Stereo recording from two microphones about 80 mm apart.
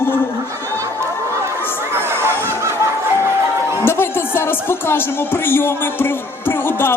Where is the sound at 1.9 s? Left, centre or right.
Right.